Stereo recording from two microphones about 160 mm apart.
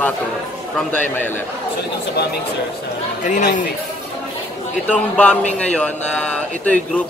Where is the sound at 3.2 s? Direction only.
50° left (ahead or behind).